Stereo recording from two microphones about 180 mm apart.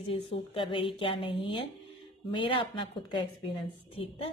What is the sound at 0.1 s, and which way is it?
A woman's voice, 30° left (ahead or behind).